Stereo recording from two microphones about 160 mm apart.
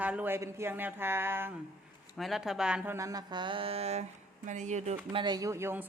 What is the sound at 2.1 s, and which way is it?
Speech, centre (ahead or behind).